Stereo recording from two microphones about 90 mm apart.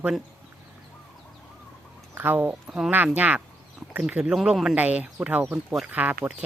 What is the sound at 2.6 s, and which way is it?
A man's voice, 10° right (ahead or behind).